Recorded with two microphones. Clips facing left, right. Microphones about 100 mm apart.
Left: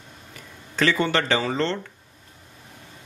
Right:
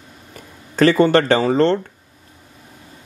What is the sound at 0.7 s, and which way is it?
Speech, 40° right (ahead or behind).